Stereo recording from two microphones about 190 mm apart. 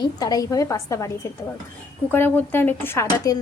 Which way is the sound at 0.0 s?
20° left (ahead or behind).